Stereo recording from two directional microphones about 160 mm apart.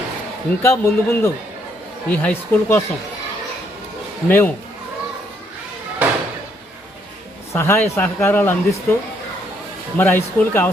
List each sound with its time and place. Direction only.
0.6 s speech: 15° left (ahead or behind)
4.3 s speech: 10° left (ahead or behind)
6.0 s slam: 10° right (ahead or behind)
7.5 s speech: 15° left (ahead or behind)
10.0 s speech: 15° left (ahead or behind)